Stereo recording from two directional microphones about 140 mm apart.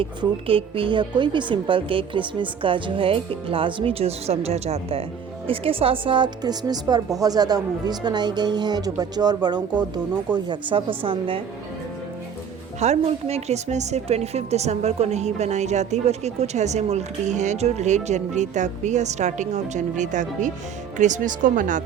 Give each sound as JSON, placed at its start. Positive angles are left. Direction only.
{"t": 0.0, "sound": "a woman's voice", "side_deg": -40}
{"t": 12.8, "sound": "a woman's voice", "side_deg": -50}